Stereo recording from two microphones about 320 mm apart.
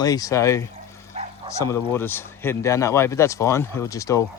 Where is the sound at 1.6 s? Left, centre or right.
Centre.